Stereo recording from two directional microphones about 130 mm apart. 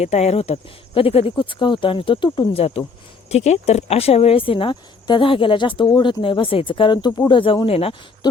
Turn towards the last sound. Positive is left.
turn(degrees=45)  # may be behind; listen again after turning